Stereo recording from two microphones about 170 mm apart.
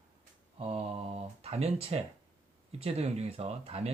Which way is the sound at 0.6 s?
35° right (ahead or behind).